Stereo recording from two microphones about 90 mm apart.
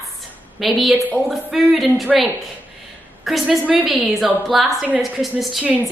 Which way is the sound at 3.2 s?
Centre (ahead or behind).